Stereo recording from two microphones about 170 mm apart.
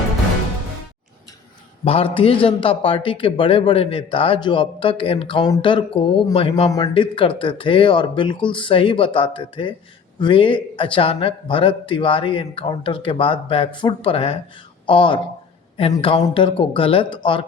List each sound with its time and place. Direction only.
1.8 s a man's voice: 35° left (ahead or behind)